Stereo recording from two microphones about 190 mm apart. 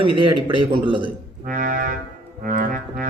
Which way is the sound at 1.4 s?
45° right (ahead or behind).